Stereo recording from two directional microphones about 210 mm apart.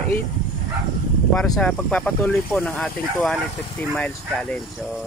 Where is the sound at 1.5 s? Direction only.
5° left (ahead or behind).